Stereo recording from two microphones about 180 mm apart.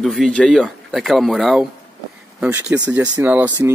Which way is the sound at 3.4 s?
20° right (ahead or behind).